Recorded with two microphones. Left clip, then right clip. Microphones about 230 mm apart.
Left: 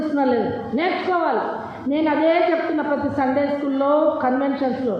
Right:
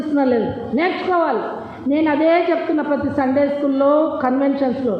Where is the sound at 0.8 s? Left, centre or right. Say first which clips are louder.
Right 3 dB; right.